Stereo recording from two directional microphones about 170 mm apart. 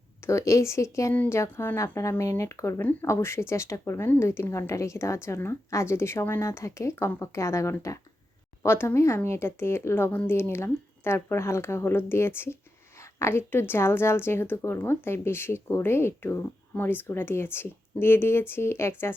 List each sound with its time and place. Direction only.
0.3 s speech: 15° left (ahead or behind)